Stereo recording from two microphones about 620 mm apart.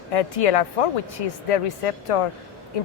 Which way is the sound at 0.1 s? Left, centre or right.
Left.